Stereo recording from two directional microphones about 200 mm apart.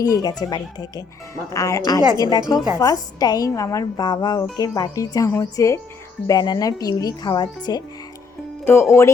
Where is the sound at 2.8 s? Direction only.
20° left (ahead or behind).